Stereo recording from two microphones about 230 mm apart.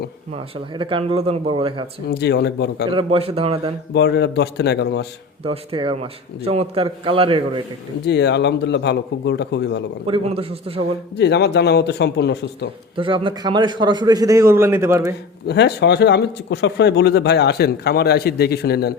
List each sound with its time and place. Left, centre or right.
0.3 s a man's voice: right
2.0 s speech: left
2.9 s a man's voice: right
3.9 s speech: left
5.4 s a man's voice: right
8.0 s speech: left
10.1 s a man's voice: right
11.2 s speech: left
13.0 s a man's voice: right
15.4 s speech: left